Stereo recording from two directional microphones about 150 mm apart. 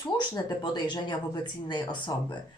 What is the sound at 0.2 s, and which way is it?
Speech, 30° left (ahead or behind).